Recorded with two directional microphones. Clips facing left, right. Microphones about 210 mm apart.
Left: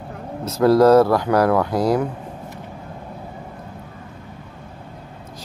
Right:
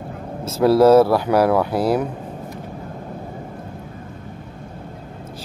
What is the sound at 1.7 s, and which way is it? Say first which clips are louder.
Speech: even; 30° right (ahead or behind).